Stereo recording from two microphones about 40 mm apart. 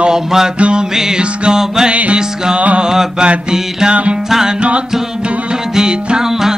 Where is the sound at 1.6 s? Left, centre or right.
Centre.